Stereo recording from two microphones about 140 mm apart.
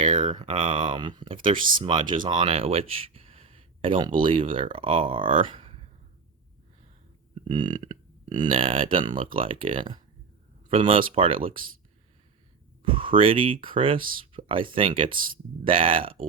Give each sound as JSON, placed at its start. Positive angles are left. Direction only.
{"t": 0.1, "sound": "speech", "side_deg": -35}
{"t": 1.4, "sound": "speech", "side_deg": -75}
{"t": 1.8, "sound": "speech", "side_deg": -35}
{"t": 7.4, "sound": "a sound", "side_deg": -35}
{"t": 8.5, "sound": "speech", "side_deg": -40}
{"t": 12.8, "sound": "speech", "side_deg": -40}